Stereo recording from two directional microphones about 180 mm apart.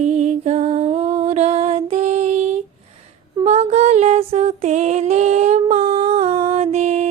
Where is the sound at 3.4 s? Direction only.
35° right (ahead or behind).